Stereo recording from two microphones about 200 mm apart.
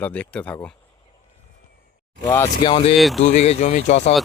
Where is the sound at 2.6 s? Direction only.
30° left (ahead or behind).